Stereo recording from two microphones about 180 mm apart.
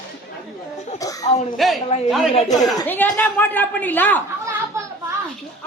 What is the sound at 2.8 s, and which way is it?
A woman's voice, 10° left (ahead or behind).